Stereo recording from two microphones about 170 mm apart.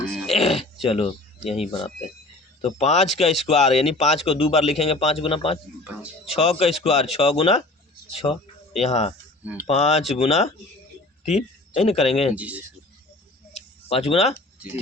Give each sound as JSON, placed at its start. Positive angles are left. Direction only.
{"t": 0.1, "sound": "throat clearing", "side_deg": 0}
{"t": 0.9, "sound": "speech", "side_deg": 35}
{"t": 1.5, "sound": "speech", "side_deg": -5}
{"t": 2.6, "sound": "a man's voice", "side_deg": 40}
{"t": 5.8, "sound": "speech", "side_deg": -10}
{"t": 6.3, "sound": "a man's voice", "side_deg": 35}
{"t": 12.3, "sound": "speech", "side_deg": -10}
{"t": 13.5, "sound": "a sound", "side_deg": 35}